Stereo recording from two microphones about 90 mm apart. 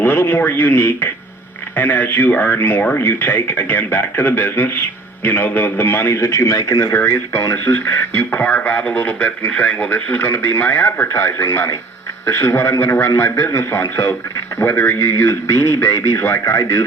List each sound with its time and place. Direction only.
0.0 s a man's voice: 25° left (ahead or behind)